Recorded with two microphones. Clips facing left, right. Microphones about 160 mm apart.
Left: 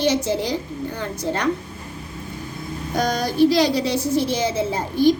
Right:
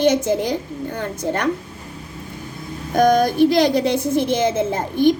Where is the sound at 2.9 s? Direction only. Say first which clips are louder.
Right 8 dB; 55° right (ahead or behind).